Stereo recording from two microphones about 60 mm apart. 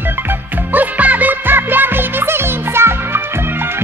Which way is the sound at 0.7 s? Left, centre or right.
Right.